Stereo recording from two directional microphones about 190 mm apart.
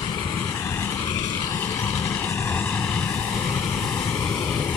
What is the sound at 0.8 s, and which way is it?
Vehicle, 15° left (ahead or behind).